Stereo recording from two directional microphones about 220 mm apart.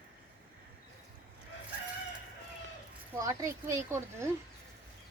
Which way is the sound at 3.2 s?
15° right (ahead or behind).